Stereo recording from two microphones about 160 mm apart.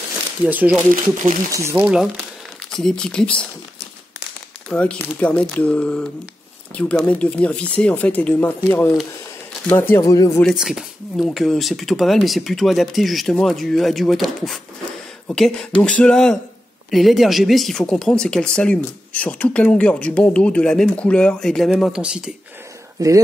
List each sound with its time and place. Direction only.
0.5 s speech: 10° right (ahead or behind)
1.9 s speech: 5° right (ahead or behind)
4.6 s speech: 5° left (ahead or behind); by 10.4 s 20° left (ahead or behind)
10.4 s speech: 5° right (ahead or behind)
22.9 s speech: 20° right (ahead or behind)